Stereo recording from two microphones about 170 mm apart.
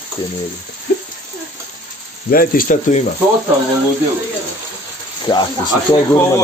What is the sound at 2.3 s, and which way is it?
Speech, 55° left (ahead or behind).